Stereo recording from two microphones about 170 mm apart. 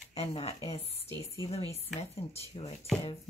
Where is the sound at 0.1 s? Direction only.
35° left (ahead or behind).